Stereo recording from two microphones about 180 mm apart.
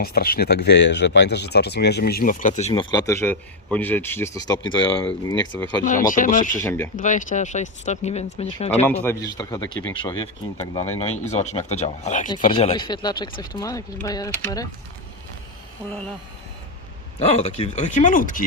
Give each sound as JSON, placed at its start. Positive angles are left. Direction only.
{"t": 0.0, "sound": "speech", "side_deg": 60}
{"t": 2.9, "sound": "a man's voice", "side_deg": 20}
{"t": 5.8, "sound": "speech", "side_deg": 45}
{"t": 6.7, "sound": "a man's voice", "side_deg": 15}
{"t": 6.9, "sound": "speech", "side_deg": 45}
{"t": 8.8, "sound": "a man's voice", "side_deg": 10}
{"t": 11.0, "sound": "speech", "side_deg": 40}
{"t": 12.5, "sound": "a man's voice", "side_deg": 30}
{"t": 17.2, "sound": "speech", "side_deg": 35}